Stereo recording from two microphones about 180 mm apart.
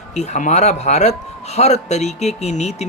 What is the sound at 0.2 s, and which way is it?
Speech, 40° left (ahead or behind).